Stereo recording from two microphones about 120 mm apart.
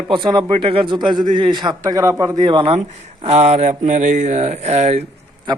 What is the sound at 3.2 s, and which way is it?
Speech, 65° right (ahead or behind).